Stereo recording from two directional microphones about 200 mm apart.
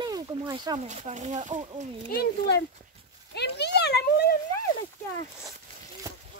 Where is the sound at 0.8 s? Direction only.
35° right (ahead or behind).